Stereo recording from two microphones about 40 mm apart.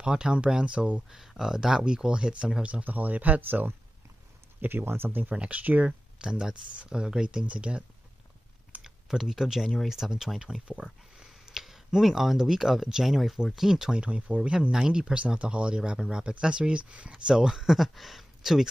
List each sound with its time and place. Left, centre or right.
0.0 s speech: right
1.1 s speech: centre; by 2.8 s right
2.8 s speech: right
4.6 s speech: right
5.3 s speech: right
5.6 s speech: right
5.9 s speech: right
8.8 s typing: centre
9.8 s speech: centre
11.1 s a sound: centre
12.0 s speech: centre
14.4 s speech: right
14.7 s speech: centre
15.1 s speech: right; by 18.7 s centre